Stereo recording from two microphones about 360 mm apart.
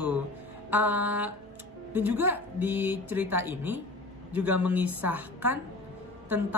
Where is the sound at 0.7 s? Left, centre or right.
Centre.